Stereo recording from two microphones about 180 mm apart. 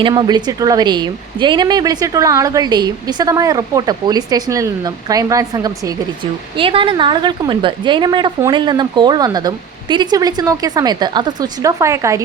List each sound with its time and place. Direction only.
0.0 s a woman's voice: 25° right (ahead or behind)
6.6 s a woman's voice: 30° right (ahead or behind)